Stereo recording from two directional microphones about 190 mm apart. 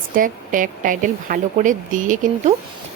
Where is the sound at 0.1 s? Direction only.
45° right (ahead or behind).